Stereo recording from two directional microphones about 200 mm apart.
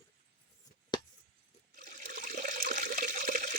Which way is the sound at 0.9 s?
20° left (ahead or behind).